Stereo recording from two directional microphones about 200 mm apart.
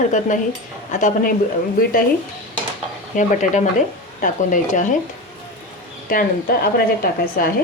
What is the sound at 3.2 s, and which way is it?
Speech, 40° left (ahead or behind).